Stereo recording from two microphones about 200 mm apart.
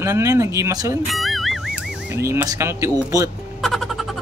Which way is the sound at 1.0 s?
Centre (ahead or behind).